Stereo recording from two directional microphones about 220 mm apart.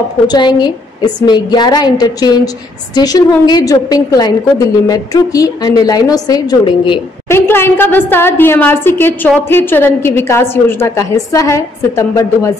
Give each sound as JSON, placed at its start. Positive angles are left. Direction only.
{"t": 0.3, "sound": "a woman's voice", "side_deg": 20}
{"t": 7.2, "sound": "a woman's voice", "side_deg": 10}